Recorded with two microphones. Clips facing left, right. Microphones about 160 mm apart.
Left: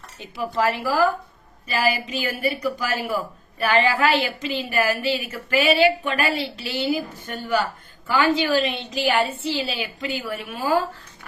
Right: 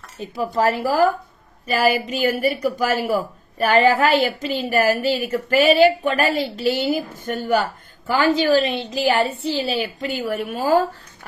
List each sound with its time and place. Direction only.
0.2 s a woman's voice: 40° right (ahead or behind)